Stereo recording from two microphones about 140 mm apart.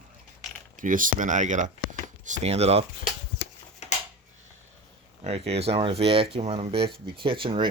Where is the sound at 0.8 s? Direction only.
70° right (ahead or behind); by 2.8 s 50° right (ahead or behind).